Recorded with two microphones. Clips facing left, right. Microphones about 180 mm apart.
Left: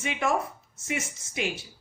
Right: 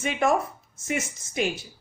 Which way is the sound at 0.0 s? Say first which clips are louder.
Right 4 dB; 45° right (ahead or behind).